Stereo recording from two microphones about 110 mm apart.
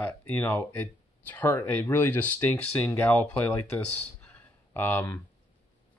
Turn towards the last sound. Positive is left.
turn(degrees=20)  # may be behind; listen again after turning